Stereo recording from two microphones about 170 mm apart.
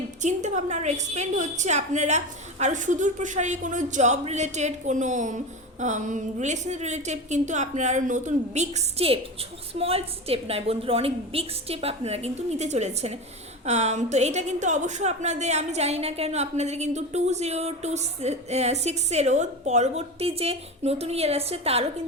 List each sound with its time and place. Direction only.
0.2 s a woman's voice: 45° right (ahead or behind)